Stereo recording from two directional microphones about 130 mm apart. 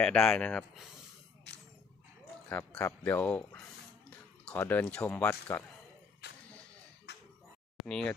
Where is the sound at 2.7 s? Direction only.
10° left (ahead or behind).